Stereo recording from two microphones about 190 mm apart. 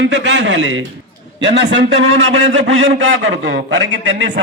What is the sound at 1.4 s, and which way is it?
A man's voice, 70° right (ahead or behind).